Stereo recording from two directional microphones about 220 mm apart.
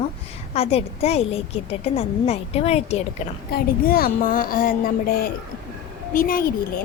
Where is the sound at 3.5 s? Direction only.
40° left (ahead or behind).